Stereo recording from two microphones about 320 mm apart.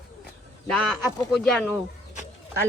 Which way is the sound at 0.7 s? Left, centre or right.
Centre.